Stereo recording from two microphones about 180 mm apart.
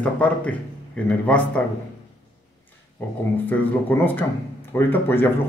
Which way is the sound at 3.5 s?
10° left (ahead or behind).